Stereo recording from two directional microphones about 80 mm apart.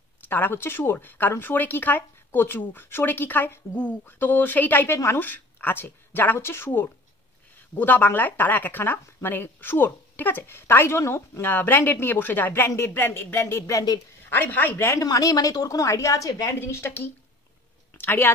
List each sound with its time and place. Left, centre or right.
0.2 s speech: left
4.9 s speech: left
5.2 s speech: left
13.7 s a woman's voice: left
14.3 s speech: left
14.8 s speech: left
15.0 s a woman's voice: left
16.5 s speech: left